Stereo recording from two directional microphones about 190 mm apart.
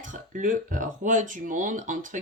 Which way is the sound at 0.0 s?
45° right (ahead or behind).